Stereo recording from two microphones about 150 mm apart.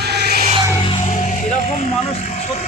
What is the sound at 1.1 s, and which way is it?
Vehicle, 55° left (ahead or behind).